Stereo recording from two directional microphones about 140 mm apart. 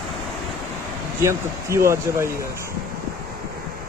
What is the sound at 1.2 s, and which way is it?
Speech, 20° right (ahead or behind).